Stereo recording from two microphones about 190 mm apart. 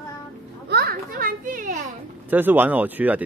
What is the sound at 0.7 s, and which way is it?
Children playing, 55° right (ahead or behind).